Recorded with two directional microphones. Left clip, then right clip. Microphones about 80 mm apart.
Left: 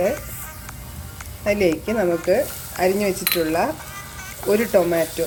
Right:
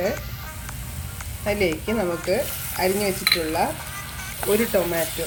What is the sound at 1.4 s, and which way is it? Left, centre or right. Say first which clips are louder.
Speech: left 4 dB; left.